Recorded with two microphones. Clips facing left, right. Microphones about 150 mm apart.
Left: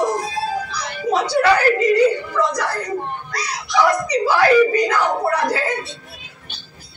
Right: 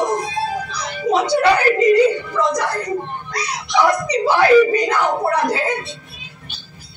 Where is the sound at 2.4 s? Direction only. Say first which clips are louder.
Right 1 dB; 20° right (ahead or behind).